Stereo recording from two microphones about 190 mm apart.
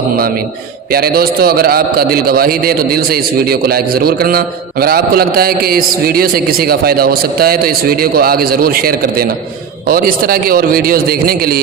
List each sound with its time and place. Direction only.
0.9 s a man's voice: 55° right (ahead or behind)